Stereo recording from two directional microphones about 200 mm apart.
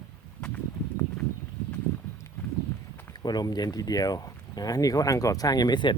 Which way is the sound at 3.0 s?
20° left (ahead or behind).